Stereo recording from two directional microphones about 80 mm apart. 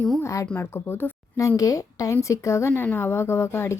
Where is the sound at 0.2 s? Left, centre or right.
Left.